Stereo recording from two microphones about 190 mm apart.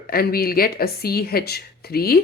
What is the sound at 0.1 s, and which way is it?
Speech, 55° left (ahead or behind).